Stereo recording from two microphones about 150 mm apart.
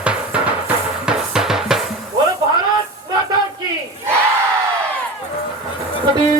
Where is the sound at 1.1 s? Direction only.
5° right (ahead or behind).